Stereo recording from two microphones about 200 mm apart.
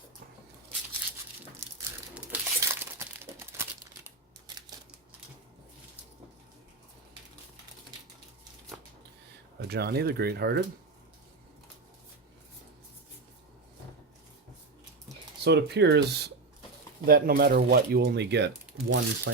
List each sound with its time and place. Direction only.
2.1 s crumpling: 10° right (ahead or behind)
9.6 s speech: 55° right (ahead or behind)
15.4 s speech: 55° right (ahead or behind)